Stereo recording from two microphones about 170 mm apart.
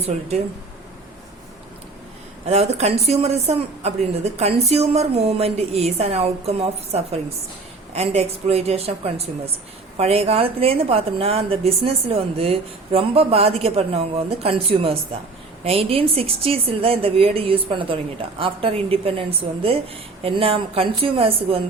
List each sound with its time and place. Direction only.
0.0 s a woman's voice: 40° right (ahead or behind)
2.5 s a woman's voice: 40° right (ahead or behind)